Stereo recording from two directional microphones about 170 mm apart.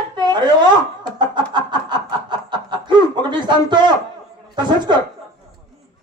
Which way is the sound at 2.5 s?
25° right (ahead or behind).